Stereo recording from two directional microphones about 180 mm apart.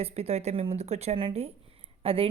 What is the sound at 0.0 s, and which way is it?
A woman's voice, 35° right (ahead or behind).